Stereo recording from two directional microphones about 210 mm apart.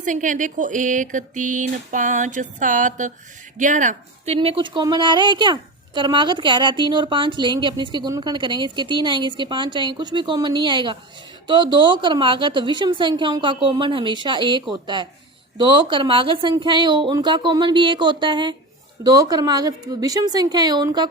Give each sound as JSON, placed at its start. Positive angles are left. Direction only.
{"t": 0.0, "sound": "speech", "side_deg": -35}
{"t": 4.4, "sound": "a woman's voice", "side_deg": -25}